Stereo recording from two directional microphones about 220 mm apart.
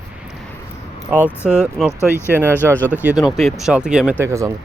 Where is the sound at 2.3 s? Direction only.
10° right (ahead or behind).